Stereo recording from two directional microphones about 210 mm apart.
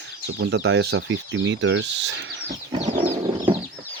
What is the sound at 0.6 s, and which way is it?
Speech, 75° right (ahead or behind).